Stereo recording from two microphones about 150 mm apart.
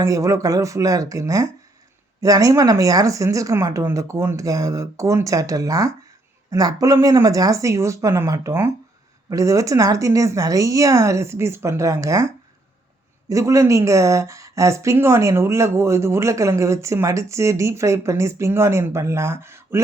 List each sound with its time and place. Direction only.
0.0 s speech: 20° right (ahead or behind)